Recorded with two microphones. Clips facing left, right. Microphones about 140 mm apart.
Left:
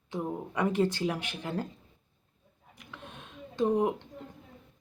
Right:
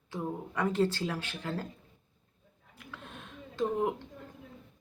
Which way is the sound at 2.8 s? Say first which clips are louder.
Even; 20° left (ahead or behind).